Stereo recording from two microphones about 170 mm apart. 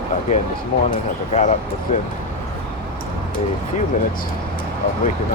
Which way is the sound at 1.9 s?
45° left (ahead or behind).